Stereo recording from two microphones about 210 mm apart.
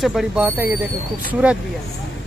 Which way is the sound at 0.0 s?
Centre (ahead or behind).